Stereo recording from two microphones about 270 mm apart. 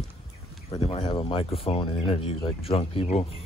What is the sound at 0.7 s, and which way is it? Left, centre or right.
Speech, left.